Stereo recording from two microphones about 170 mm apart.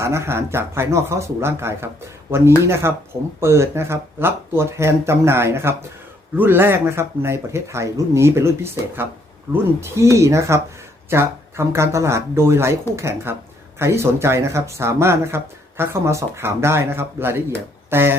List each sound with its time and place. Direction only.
0.0 s speech: 15° right (ahead or behind)